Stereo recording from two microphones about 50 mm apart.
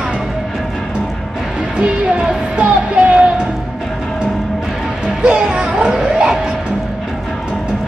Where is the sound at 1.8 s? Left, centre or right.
Centre.